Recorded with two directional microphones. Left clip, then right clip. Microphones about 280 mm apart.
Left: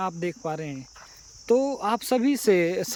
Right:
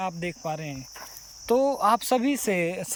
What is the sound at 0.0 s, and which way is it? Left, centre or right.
Cricket, centre.